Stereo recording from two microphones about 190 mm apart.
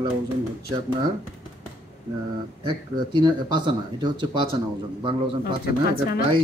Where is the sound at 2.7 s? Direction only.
25° right (ahead or behind).